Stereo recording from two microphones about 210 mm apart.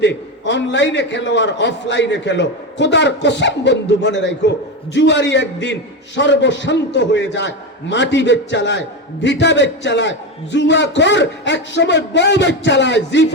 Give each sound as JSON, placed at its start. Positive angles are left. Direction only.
{"t": 0.0, "sound": "a man's voice", "side_deg": 60}